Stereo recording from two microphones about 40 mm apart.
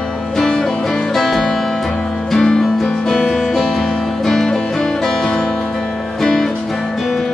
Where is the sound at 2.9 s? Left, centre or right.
Centre.